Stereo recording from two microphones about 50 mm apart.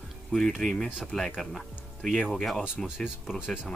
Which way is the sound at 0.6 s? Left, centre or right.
Centre.